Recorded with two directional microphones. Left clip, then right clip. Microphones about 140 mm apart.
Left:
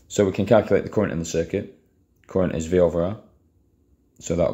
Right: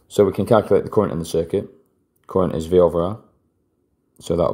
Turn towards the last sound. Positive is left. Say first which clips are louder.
# right 3 dB
turn(degrees=-40)  # may be behind; listen again after turning